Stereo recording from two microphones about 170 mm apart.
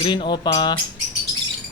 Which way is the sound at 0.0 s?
30° left (ahead or behind).